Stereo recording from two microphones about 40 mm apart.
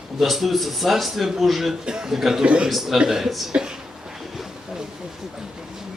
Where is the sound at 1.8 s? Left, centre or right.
Centre.